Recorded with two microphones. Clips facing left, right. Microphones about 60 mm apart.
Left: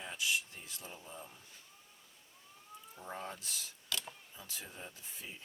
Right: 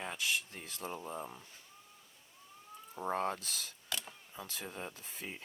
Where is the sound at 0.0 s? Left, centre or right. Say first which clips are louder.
Even; right.